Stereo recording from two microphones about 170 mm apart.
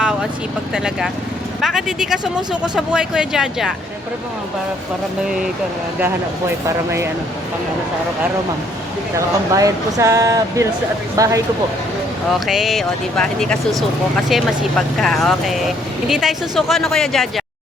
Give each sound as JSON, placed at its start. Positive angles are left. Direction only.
{"t": 0.7, "sound": "speech", "side_deg": -5}
{"t": 6.7, "sound": "speech", "side_deg": -15}
{"t": 9.1, "sound": "speech", "side_deg": -20}
{"t": 12.5, "sound": "speech", "side_deg": 0}